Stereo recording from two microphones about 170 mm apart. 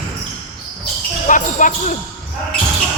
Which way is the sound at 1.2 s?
50° left (ahead or behind).